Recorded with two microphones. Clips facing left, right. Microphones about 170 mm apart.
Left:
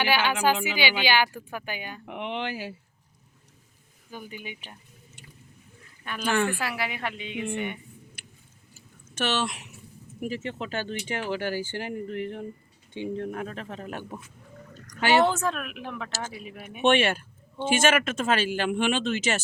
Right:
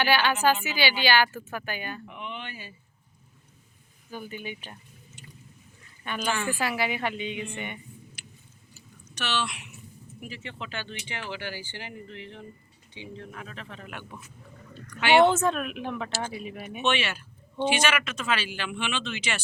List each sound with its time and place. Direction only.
0.0 s speech: 15° left (ahead or behind)
2.0 s speech: 80° left
4.1 s speech: 15° left (ahead or behind)
6.2 s a woman's voice: 60° left (ahead or behind)
6.6 s a woman's voice: centre (ahead or behind)
8.2 s a sound: 55° left (ahead or behind)
9.1 s speech: 45° left (ahead or behind)
15.3 s a woman's voice: centre (ahead or behind)
16.8 s speech: 50° left (ahead or behind)